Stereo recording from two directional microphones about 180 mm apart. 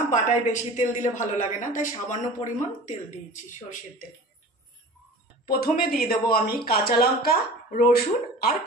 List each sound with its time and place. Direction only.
0.1 s a woman's voice: 45° left (ahead or behind)
5.5 s speech: 55° left (ahead or behind)